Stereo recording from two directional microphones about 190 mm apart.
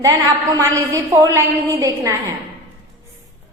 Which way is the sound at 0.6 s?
15° right (ahead or behind).